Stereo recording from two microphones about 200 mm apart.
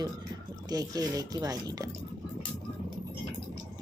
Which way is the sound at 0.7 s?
20° right (ahead or behind).